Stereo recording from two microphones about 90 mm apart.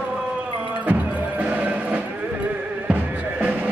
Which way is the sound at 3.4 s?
20° right (ahead or behind).